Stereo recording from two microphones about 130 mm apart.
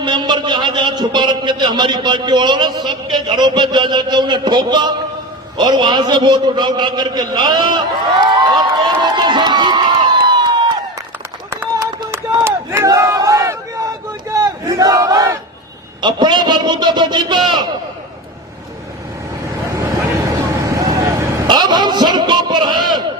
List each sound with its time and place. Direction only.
0.0 s a man's voice: 35° right (ahead or behind)
11.5 s run: 20° right (ahead or behind)
12.5 s crowd: 20° right (ahead or behind)
14.3 s battle cry: 25° right (ahead or behind)
16.0 s a man's voice: 35° right (ahead or behind)
20.7 s a sound: 25° right (ahead or behind)